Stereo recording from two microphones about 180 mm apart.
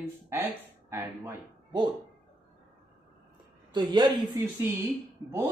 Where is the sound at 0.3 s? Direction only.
15° right (ahead or behind).